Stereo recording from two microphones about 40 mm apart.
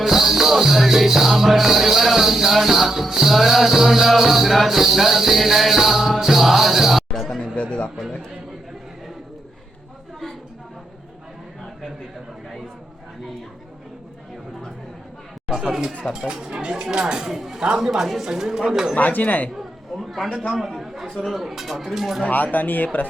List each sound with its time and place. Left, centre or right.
0.0 s music: centre
7.1 s chatter: centre
7.3 s a sound: left
15.4 s speech: centre
18.9 s speech: left
19.5 s a sound: centre
20.6 s a man's voice: centre
22.5 s speech: left